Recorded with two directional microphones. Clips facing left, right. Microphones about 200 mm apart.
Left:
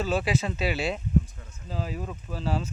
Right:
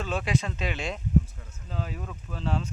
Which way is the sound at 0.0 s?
5° left (ahead or behind).